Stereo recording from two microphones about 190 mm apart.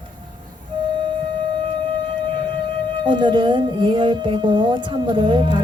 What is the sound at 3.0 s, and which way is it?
Speech, 25° right (ahead or behind).